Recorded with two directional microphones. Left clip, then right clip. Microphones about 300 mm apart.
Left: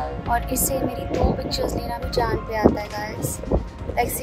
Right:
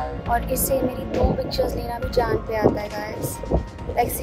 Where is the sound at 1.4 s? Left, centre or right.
Centre.